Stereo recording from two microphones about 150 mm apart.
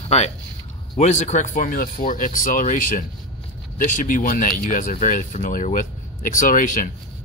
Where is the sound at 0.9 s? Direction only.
55° left (ahead or behind).